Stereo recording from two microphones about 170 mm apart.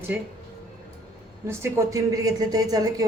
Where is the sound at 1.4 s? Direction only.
15° right (ahead or behind).